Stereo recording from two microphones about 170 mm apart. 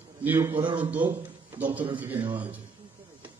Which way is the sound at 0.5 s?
30° right (ahead or behind).